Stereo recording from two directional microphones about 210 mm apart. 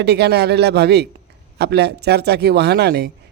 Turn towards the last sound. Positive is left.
turn(degrees=-50)  # may be behind; listen again after turning